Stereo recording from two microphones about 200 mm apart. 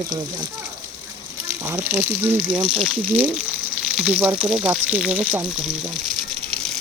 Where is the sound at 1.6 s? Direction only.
10° right (ahead or behind).